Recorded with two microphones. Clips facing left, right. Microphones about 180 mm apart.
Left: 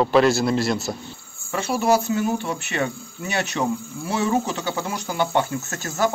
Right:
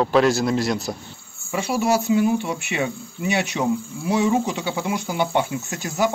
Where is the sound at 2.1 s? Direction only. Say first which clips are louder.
Right 4 dB; 15° right (ahead or behind).